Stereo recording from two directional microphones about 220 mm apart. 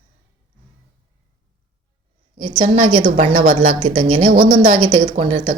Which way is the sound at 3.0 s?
35° right (ahead or behind).